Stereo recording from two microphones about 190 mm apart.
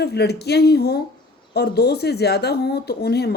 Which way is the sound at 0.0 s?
60° left (ahead or behind).